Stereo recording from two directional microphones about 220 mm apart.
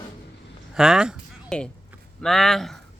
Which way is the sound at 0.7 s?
5° right (ahead or behind).